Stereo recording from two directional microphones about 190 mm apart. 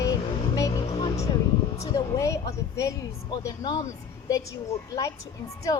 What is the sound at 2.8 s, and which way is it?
Speech, 20° left (ahead or behind).